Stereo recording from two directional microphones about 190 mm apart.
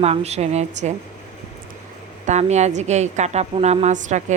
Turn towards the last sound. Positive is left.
turn(degrees=-40)  # may be behind; listen again after turning